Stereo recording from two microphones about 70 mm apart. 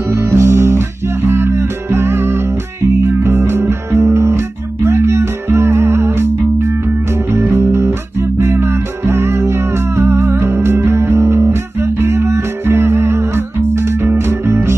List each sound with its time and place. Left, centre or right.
0.1 s music: right
7.3 s music: right